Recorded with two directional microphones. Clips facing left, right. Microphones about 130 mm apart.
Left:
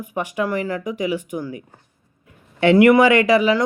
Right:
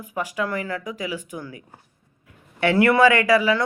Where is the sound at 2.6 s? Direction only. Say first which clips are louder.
Left 4 dB; 20° left (ahead or behind).